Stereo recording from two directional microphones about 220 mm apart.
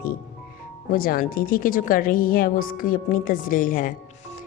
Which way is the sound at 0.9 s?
40° left (ahead or behind).